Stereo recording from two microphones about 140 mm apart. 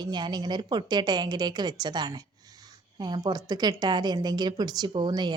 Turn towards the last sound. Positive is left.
turn(degrees=-30)  # may be behind; listen again after turning